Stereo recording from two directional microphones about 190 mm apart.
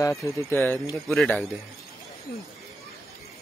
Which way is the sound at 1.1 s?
Centre (ahead or behind).